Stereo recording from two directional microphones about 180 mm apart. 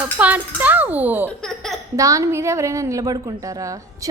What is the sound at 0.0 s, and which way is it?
A woman's voice, 10° right (ahead or behind).